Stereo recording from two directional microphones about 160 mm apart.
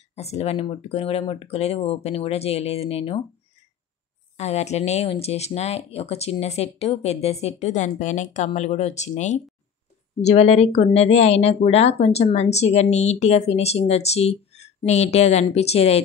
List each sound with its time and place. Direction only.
0.1 s speech: 40° left (ahead or behind)
4.4 s speech: 45° left (ahead or behind)